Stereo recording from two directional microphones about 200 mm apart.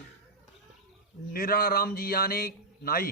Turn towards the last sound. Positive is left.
turn(degrees=45)  # may be behind; listen again after turning